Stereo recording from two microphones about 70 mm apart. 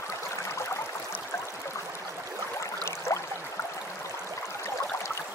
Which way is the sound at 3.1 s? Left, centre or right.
Left.